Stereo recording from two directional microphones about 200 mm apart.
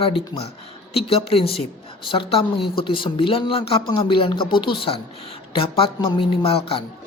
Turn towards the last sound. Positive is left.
turn(degrees=30)  # may be behind; listen again after turning